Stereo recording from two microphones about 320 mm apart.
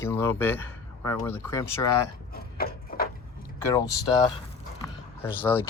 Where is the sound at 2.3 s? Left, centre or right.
Left.